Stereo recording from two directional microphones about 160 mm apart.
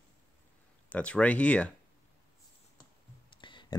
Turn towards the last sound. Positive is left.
turn(degrees=30)  # may be behind; listen again after turning